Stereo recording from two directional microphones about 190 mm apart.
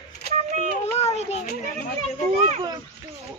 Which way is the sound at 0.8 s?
35° left (ahead or behind).